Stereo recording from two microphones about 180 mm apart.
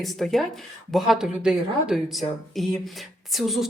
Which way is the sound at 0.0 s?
Centre (ahead or behind).